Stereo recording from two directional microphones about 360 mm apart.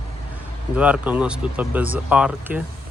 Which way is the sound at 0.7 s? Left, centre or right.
Centre.